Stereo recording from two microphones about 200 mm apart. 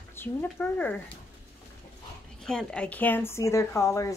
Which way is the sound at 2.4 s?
5° left (ahead or behind).